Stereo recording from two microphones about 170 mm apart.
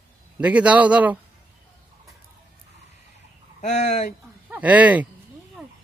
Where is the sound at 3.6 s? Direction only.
45° left (ahead or behind).